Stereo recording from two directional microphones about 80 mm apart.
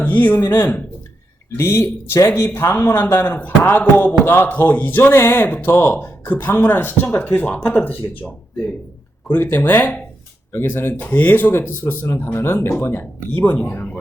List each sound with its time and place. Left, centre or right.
0.0 s speech: left
1.5 s speech: left
9.4 s speech: left